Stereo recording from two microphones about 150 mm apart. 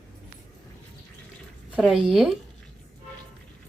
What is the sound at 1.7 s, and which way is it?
Speech, 5° right (ahead or behind).